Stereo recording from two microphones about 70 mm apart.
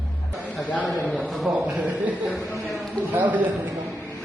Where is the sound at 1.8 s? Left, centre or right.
Right.